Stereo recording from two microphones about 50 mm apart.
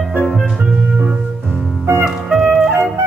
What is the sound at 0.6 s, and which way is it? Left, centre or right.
Music, centre.